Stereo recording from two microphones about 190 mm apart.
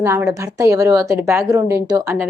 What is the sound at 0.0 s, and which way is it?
A woman's voice, 15° right (ahead or behind).